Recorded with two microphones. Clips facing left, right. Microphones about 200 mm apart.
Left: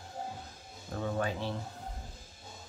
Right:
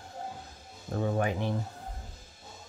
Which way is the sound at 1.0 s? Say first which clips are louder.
Right 4 dB; 15° right (ahead or behind).